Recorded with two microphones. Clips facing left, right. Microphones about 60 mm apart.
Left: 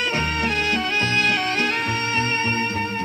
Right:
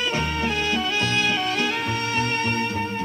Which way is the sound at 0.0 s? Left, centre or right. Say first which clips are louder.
Left 2 dB; left.